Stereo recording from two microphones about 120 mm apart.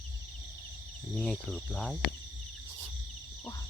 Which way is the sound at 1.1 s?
5° left (ahead or behind).